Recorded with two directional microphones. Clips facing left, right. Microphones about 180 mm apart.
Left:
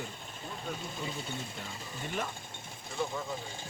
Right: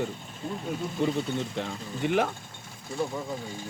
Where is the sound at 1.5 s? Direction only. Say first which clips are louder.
Right 10 dB; 85° right.